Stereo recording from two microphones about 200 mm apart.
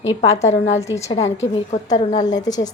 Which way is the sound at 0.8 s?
15° left (ahead or behind).